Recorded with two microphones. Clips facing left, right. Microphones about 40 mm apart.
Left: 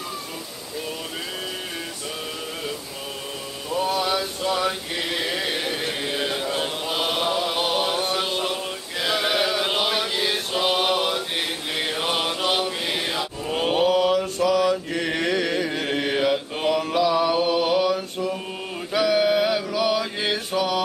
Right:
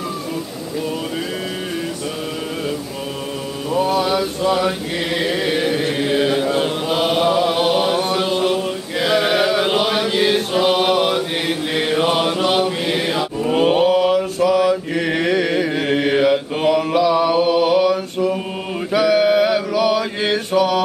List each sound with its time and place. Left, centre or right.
3.7 s chant: centre
9.0 s a sound: centre
9.8 s chant: centre
18.9 s mantra: centre